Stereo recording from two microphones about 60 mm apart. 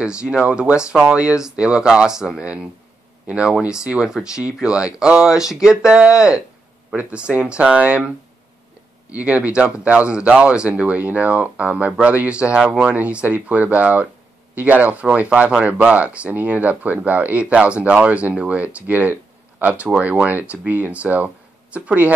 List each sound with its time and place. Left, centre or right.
0.0 s speech: centre
9.1 s speech: right